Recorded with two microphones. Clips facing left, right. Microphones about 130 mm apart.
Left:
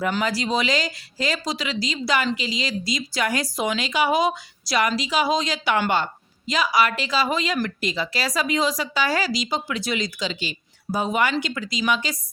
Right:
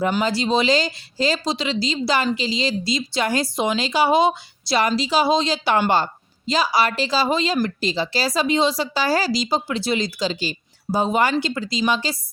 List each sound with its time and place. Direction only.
0.2 s a woman's voice: 25° right (ahead or behind)